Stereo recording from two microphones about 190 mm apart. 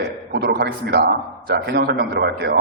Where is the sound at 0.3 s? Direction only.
60° right (ahead or behind).